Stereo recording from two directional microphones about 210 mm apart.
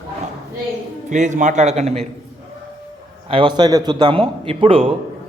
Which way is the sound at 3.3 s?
25° right (ahead or behind).